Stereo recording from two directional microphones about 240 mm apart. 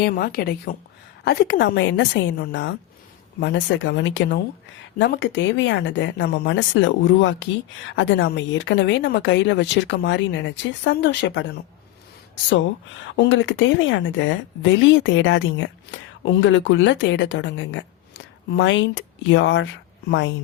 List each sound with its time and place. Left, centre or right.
0.0 s a woman's voice: left
13.1 s a woman's voice: left